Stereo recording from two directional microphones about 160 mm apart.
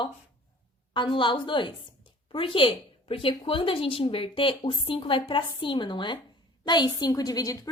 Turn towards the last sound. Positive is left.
turn(degrees=20)  # may be behind; listen again after turning